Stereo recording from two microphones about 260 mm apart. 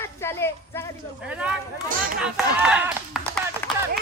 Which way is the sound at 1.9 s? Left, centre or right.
Right.